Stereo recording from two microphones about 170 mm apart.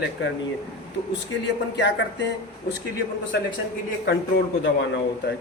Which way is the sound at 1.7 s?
90° left.